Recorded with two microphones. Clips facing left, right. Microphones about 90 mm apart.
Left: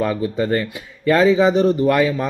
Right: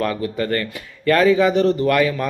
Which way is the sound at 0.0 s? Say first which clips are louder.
Left 2 dB; 15° left (ahead or behind).